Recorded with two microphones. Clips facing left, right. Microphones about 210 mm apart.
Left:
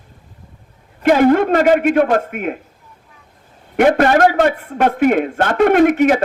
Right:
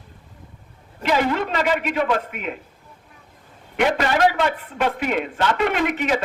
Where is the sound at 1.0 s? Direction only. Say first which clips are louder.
Left 10 dB; 50° left (ahead or behind).